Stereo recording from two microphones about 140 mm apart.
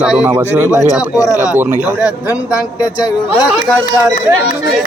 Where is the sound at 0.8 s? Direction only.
5° right (ahead or behind).